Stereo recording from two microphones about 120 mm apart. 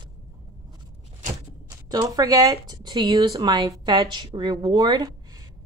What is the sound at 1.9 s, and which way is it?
Speech, 30° right (ahead or behind).